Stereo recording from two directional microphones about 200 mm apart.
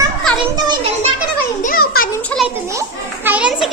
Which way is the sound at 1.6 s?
45° left (ahead or behind).